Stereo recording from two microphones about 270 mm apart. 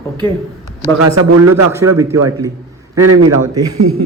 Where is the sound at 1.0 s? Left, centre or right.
Right.